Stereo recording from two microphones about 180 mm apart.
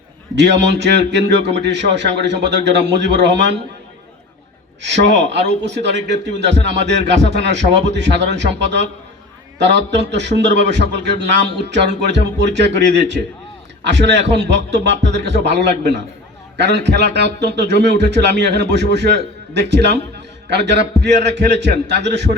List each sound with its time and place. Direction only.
0.3 s a man's voice: 75° right (ahead or behind)
4.8 s a man's voice: 75° right (ahead or behind)